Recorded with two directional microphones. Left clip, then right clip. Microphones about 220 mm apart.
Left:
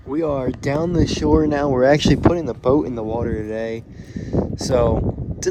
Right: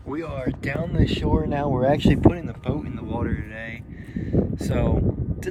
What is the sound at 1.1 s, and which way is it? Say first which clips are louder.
Speech: left 9 dB; 40° left (ahead or behind).